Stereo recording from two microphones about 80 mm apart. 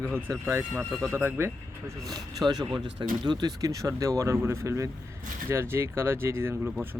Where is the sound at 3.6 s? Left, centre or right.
Right.